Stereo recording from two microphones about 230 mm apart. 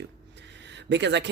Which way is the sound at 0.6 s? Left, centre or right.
Right.